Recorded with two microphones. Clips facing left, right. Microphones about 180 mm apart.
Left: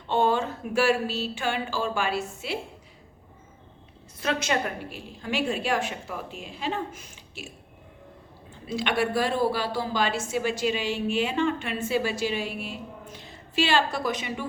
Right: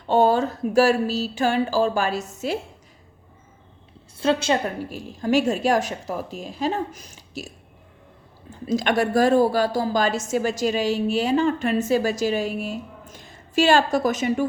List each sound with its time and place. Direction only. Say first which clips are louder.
0.1 s a woman's voice: right 5 dB; 40° right (ahead or behind)
4.2 s a woman's voice: right 6 dB; 30° right (ahead or behind)